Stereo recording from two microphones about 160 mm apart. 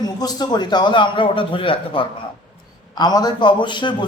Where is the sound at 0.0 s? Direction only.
25° left (ahead or behind).